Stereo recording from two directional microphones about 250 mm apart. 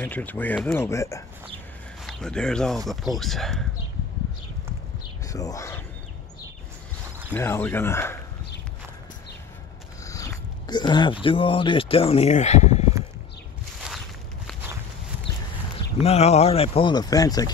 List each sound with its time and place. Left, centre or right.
0.0 s speech: centre
5.3 s speech: centre
7.3 s speech: centre
10.0 s speech: centre
16.0 s speech: left